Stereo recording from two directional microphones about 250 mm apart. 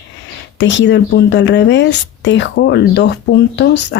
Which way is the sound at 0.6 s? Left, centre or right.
Left.